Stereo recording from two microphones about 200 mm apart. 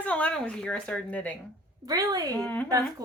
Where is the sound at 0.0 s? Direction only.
5° left (ahead or behind).